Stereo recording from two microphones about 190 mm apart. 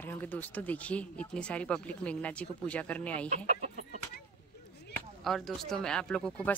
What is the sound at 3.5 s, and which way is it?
Chicken, 40° right (ahead or behind).